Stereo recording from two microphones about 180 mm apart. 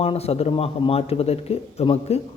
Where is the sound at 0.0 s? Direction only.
35° left (ahead or behind).